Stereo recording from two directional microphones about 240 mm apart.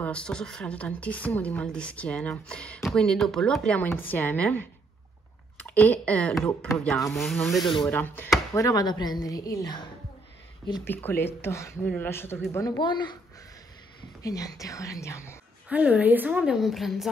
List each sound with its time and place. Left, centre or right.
0.0 s speech: centre
14.2 s speech: centre
15.7 s speech: centre